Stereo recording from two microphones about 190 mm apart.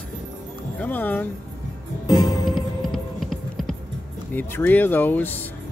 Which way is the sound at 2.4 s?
Centre (ahead or behind).